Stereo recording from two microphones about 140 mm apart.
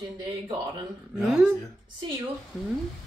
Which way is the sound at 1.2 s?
10° right (ahead or behind).